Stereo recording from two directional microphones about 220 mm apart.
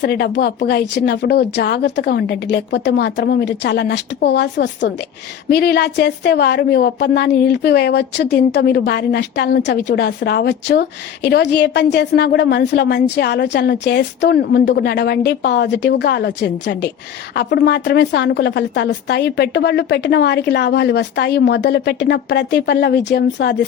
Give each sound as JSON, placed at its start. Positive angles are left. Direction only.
{"t": 0.0, "sound": "a woman's voice", "side_deg": 50}